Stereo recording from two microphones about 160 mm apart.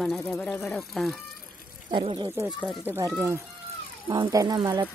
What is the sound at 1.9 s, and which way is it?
Speech, 30° right (ahead or behind).